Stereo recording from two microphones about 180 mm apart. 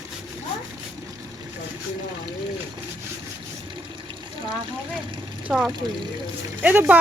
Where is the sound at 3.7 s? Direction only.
25° right (ahead or behind).